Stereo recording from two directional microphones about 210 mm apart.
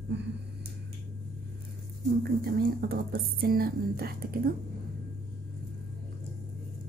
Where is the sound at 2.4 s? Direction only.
45° right (ahead or behind).